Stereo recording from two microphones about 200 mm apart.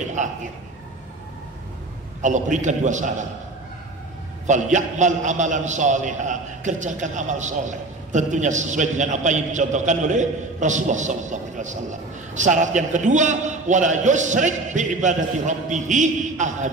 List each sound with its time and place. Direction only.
0.0 s a sound: 35° right (ahead or behind)
2.2 s a man's voice: 35° right (ahead or behind)
4.5 s a man's voice: 40° right (ahead or behind)